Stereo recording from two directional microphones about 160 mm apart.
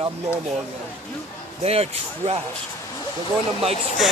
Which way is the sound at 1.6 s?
40° right (ahead or behind).